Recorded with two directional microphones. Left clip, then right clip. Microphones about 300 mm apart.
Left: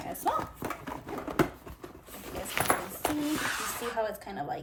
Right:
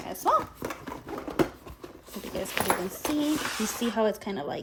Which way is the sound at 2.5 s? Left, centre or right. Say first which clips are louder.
Right 1 dB; centre.